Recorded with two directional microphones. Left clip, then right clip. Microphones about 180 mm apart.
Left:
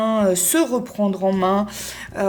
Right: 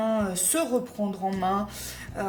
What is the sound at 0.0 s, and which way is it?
Speech, 45° left (ahead or behind).